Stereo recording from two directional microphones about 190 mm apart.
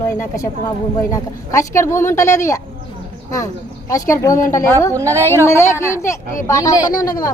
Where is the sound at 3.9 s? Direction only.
15° left (ahead or behind).